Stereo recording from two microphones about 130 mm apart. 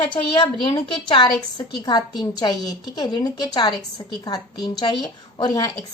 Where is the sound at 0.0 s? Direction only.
40° left (ahead or behind).